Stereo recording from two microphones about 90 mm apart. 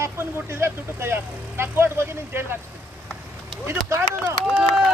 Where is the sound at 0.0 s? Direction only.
30° right (ahead or behind).